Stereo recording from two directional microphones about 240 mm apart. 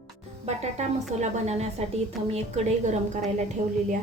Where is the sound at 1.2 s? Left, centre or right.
Right.